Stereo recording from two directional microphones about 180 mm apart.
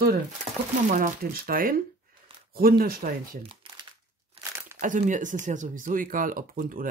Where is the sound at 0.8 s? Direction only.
50° right (ahead or behind).